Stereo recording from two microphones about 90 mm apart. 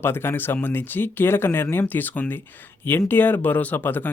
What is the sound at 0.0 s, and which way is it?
Speech, 25° left (ahead or behind).